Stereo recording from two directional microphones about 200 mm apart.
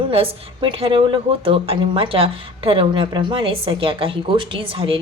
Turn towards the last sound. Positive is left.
turn(degrees=-25)  # may be behind; listen again after turning